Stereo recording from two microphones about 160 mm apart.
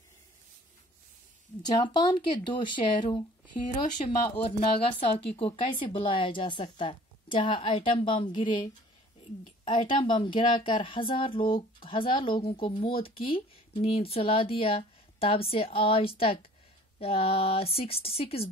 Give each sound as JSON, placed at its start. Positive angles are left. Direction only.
{"t": 1.6, "sound": "speech", "side_deg": 25}
{"t": 4.0, "sound": "speech", "side_deg": 40}
{"t": 9.7, "sound": "speech", "side_deg": 30}